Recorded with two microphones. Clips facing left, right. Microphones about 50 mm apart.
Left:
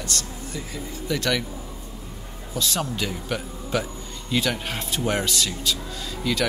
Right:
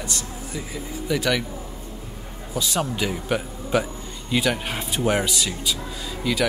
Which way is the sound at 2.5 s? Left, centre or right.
Centre.